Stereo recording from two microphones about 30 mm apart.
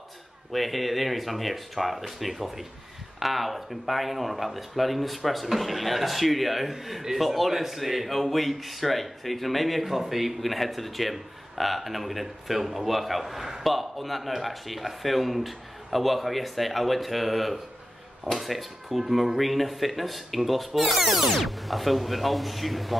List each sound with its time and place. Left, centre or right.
0.5 s speech: centre